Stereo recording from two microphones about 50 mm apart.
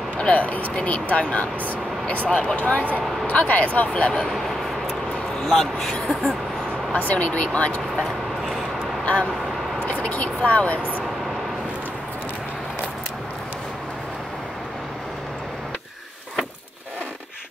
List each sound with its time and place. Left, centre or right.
0.2 s speech: left
2.2 s speech: centre
2.5 s speech: left
5.4 s speech: centre
6.9 s speech: left
9.0 s speech: left